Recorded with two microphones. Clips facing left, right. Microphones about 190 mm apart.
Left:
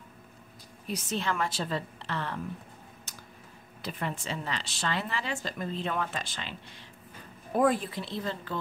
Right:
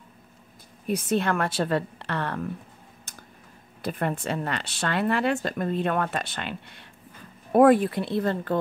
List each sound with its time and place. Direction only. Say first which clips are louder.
0.8 s speech: right 8 dB; 55° right (ahead or behind)
3.1 s a sound: right 4 dB; 55° right (ahead or behind)
3.8 s speech: right 7 dB; 55° right (ahead or behind)